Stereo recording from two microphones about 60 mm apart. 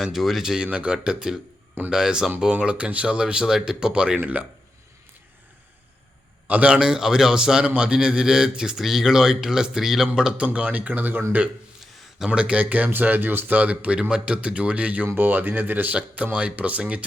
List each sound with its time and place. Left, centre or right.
0.0 s speech: centre
4.2 s speech: right
6.5 s speech: right
12.2 s speech: centre
15.0 s speech: right; by 17.1 s centre